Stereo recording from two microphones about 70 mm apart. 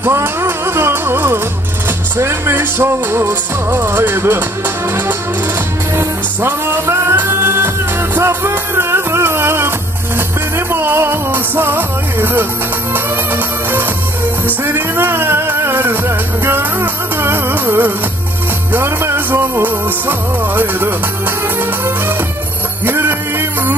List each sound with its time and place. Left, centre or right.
0.0 s music: right
5.9 s music: right
10.7 s music: right
14.6 s music: right
22.8 s music: right